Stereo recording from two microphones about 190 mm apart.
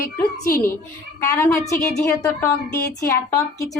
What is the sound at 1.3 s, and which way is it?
Speech, 15° left (ahead or behind).